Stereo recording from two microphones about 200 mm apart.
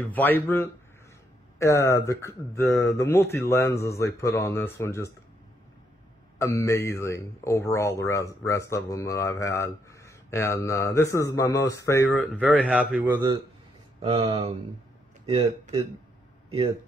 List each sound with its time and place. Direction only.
0.1 s speech: 10° left (ahead or behind)
6.3 s speech: 15° left (ahead or behind)
12.6 s a man's voice: 5° right (ahead or behind)
13.9 s speech: 30° right (ahead or behind)